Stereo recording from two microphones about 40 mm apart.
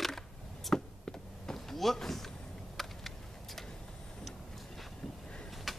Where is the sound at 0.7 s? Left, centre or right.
Centre.